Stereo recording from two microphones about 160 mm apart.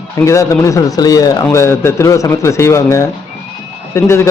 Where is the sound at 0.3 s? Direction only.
20° left (ahead or behind).